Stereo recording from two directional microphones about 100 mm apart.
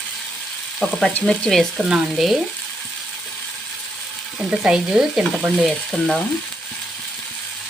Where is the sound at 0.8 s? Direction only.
10° left (ahead or behind).